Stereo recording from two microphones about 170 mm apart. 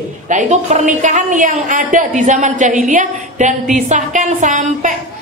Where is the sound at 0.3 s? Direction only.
45° right (ahead or behind).